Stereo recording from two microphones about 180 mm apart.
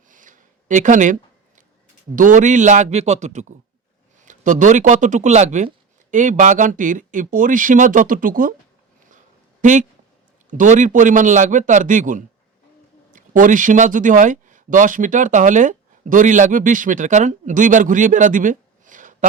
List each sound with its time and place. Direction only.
0.1 s a sound: 45° right (ahead or behind)
2.1 s a man's voice: 45° right (ahead or behind)
9.6 s speech: 45° right (ahead or behind)